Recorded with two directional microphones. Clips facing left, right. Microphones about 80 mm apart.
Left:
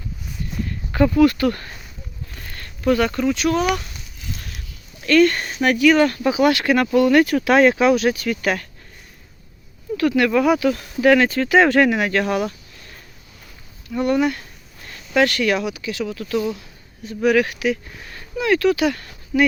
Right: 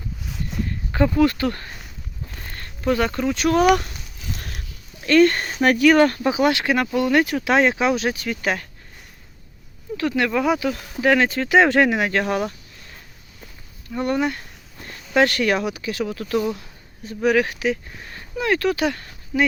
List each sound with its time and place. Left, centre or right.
1.1 s speech: right
2.4 s a sound: right
3.3 s speech: right
4.4 s a sound: right
5.0 s speech: right
6.2 s speech: right
10.0 s speech: right
13.9 s speech: right